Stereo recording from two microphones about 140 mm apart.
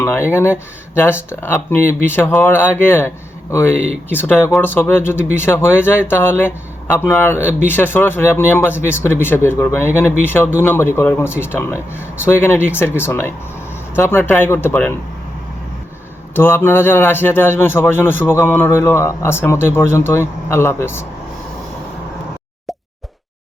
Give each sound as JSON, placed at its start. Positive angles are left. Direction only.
{"t": 0.0, "sound": "a man's voice", "side_deg": 15}
{"t": 16.3, "sound": "a man's voice", "side_deg": 15}